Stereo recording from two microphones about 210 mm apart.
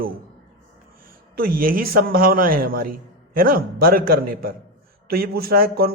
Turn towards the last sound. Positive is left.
turn(degrees=-45)  # may be behind; listen again after turning